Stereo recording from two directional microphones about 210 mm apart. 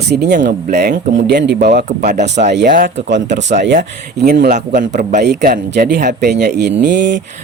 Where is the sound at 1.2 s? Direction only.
55° right (ahead or behind).